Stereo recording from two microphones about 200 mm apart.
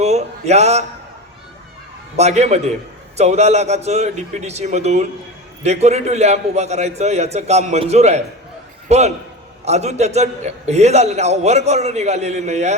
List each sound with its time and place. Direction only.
0.0 s speech: 35° right (ahead or behind)
2.1 s a man's voice: 35° right (ahead or behind)